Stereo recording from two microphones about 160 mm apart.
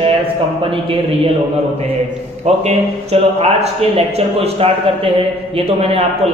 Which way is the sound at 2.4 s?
40° right (ahead or behind).